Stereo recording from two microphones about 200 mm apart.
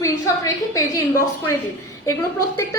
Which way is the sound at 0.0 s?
15° left (ahead or behind).